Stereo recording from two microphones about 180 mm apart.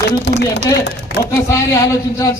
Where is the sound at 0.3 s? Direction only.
70° left (ahead or behind).